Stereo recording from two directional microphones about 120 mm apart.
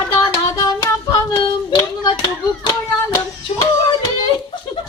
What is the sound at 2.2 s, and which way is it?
Speech, 35° left (ahead or behind).